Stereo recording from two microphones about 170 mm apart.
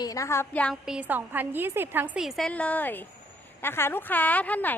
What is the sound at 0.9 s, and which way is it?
A woman's voice, 10° right (ahead or behind).